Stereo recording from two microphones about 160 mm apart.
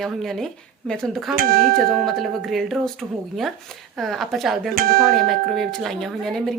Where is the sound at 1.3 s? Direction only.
65° right (ahead or behind).